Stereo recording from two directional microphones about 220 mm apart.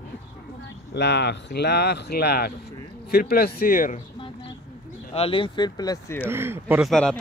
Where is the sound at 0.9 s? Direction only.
50° left (ahead or behind).